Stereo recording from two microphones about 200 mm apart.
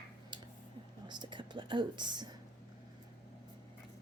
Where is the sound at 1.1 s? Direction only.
25° right (ahead or behind).